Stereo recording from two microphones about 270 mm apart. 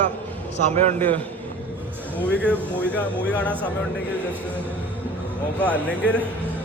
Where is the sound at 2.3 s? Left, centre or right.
Centre.